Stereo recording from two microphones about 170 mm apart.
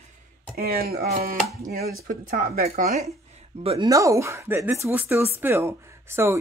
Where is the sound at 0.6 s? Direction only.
65° right (ahead or behind).